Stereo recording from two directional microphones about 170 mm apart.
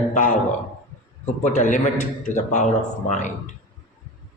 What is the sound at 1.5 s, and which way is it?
A man's voice, 45° left (ahead or behind).